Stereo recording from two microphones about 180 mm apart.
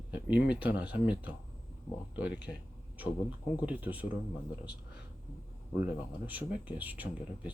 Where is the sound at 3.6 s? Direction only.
10° right (ahead or behind).